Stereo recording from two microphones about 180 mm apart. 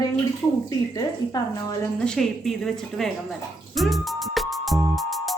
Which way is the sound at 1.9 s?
5° left (ahead or behind).